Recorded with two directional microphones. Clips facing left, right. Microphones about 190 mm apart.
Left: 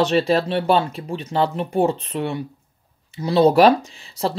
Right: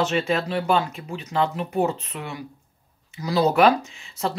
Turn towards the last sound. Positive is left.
turn(degrees=35)  # may be behind; listen again after turning